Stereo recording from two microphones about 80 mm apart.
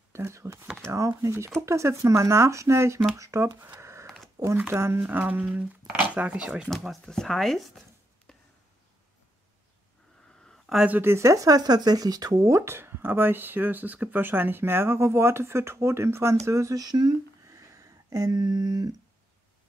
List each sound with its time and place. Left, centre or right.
0.1 s speech: right
3.8 s a sound: right
4.6 s speech: right
5.2 s speech: centre
6.7 s speech: centre
10.9 s speech: right
12.5 s speech: right
17.5 s a sound: right